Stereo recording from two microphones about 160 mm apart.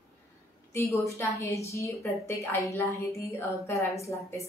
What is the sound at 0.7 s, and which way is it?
A woman's voice, 15° left (ahead or behind).